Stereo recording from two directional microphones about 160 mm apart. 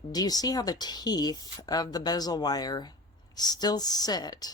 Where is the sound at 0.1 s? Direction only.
25° left (ahead or behind).